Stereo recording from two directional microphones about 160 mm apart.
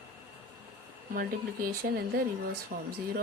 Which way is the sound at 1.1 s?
65° right (ahead or behind).